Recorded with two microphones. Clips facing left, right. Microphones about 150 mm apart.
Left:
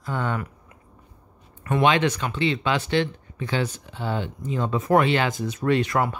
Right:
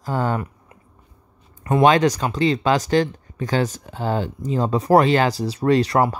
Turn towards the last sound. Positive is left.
turn(degrees=-35)  # may be behind; listen again after turning